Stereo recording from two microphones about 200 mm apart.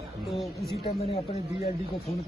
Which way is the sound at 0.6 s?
30° left (ahead or behind).